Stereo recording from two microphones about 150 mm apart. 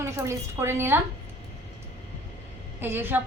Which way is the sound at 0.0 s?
20° right (ahead or behind).